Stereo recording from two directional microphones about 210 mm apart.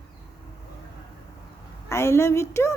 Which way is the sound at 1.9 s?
15° left (ahead or behind).